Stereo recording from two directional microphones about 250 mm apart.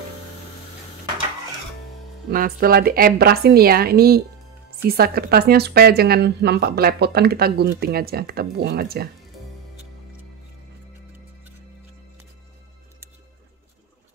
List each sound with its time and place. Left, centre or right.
2.3 s speech: right